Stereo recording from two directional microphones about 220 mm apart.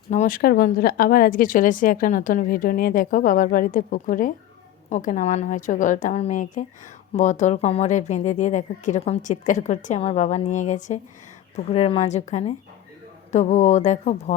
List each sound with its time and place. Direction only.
0.1 s speech: 35° left (ahead or behind)